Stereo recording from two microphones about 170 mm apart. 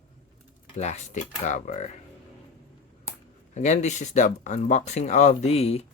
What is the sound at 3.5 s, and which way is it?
Speech, 45° left (ahead or behind).